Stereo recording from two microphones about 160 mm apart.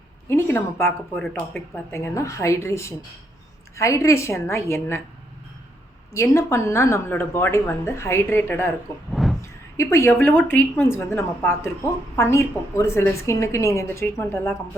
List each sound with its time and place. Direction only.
0.3 s speech: 15° left (ahead or behind)
6.1 s speech: 15° left (ahead or behind)
9.1 s vehicle: centre (ahead or behind)
9.7 s speech: 20° left (ahead or behind)